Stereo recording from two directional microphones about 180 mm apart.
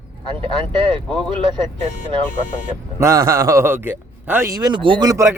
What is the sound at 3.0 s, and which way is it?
A man's voice, 20° right (ahead or behind).